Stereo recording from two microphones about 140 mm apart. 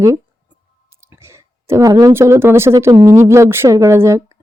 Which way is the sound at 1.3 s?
20° right (ahead or behind).